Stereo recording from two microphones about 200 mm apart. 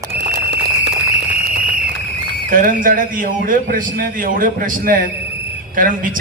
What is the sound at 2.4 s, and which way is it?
A man's voice, 40° right (ahead or behind).